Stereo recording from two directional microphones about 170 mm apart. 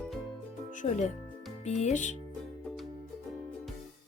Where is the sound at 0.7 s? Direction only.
45° left (ahead or behind).